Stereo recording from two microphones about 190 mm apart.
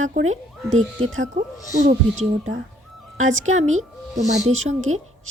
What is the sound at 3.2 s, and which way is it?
Speech, 90° right.